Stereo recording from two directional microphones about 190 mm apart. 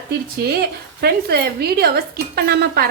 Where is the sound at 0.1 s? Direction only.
55° right (ahead or behind).